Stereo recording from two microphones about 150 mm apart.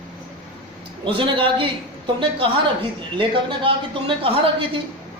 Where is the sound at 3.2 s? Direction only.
35° right (ahead or behind).